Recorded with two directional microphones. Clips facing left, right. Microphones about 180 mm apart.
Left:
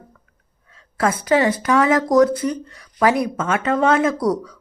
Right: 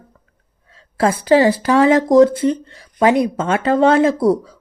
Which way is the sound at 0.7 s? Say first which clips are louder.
Right 3 dB; 30° right (ahead or behind).